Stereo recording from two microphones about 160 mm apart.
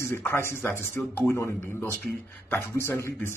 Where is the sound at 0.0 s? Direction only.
15° left (ahead or behind).